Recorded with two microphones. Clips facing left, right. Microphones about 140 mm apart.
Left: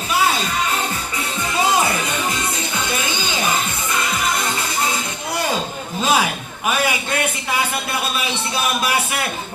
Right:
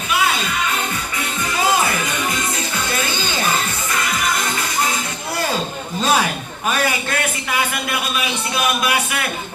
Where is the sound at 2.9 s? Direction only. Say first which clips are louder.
Right 1 dB; 15° left (ahead or behind).